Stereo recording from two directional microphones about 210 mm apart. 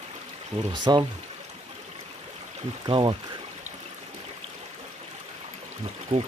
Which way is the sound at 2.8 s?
20° right (ahead or behind).